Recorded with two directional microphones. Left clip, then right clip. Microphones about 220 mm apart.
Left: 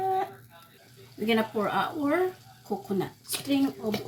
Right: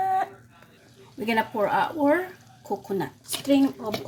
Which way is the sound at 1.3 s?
40° right (ahead or behind).